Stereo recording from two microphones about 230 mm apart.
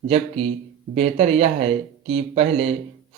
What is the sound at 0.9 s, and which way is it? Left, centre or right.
Speech, right.